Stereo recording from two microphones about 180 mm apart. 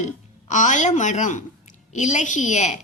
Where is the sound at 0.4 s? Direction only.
45° left (ahead or behind).